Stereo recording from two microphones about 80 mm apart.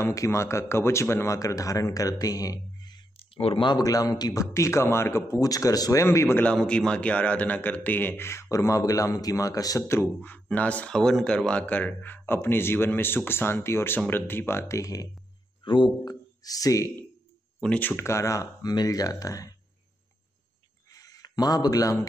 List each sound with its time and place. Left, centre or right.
0.0 s speech: left
3.5 s speech: left
3.8 s speech: left
5.4 s speech: left
6.0 s speech: left
6.4 s a man's voice: centre; by 9.8 s left
9.8 s a man's voice: left
11.0 s a man's voice: centre; by 15.0 s left
15.6 s speech: left
16.0 s speech: left
17.6 s speech: centre
17.9 s speech: left
20.9 s a sound: left